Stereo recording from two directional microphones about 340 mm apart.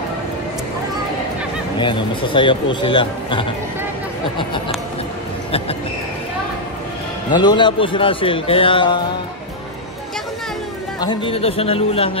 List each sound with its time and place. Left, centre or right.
1.8 s speech: centre
7.3 s speech: centre
11.0 s speech: centre